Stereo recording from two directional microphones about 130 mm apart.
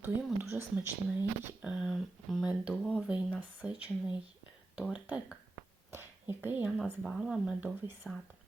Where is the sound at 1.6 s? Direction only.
5° right (ahead or behind).